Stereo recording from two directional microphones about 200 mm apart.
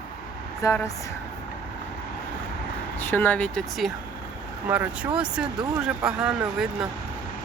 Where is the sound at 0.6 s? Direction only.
15° left (ahead or behind).